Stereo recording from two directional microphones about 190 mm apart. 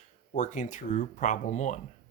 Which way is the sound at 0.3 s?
40° left (ahead or behind).